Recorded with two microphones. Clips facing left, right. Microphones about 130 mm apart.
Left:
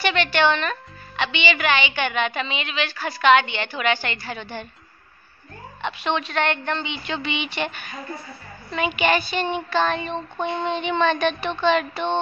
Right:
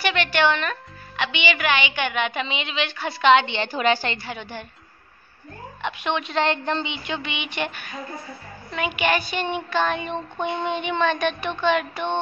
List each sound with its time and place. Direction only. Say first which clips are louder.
0.0 s a woman's voice: left 1 dB; 10° right (ahead or behind); by 4.2 s 35° right (ahead or behind)
4.2 s a woman's voice: left 1 dB; 15° right (ahead or behind)
5.8 s a woman's voice: left 1 dB; 5° right (ahead or behind)
6.2 s a woman's voice: right 1 dB; 25° right (ahead or behind)
6.9 s a woman's voice: left 2 dB; 10° right (ahead or behind)